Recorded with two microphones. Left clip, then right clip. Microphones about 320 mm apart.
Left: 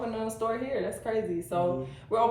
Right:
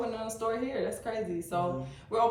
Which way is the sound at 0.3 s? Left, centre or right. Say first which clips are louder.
Left 1 dB; centre.